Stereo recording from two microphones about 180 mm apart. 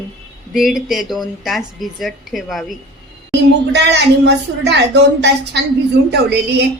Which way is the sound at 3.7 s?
70° right (ahead or behind).